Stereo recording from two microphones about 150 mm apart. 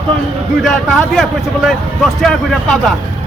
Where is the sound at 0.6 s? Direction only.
Centre (ahead or behind).